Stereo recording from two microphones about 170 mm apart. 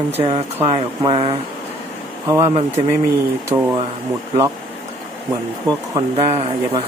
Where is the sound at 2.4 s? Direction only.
35° right (ahead or behind).